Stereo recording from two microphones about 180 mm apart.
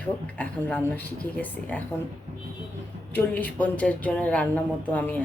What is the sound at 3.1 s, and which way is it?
Speech, 10° left (ahead or behind).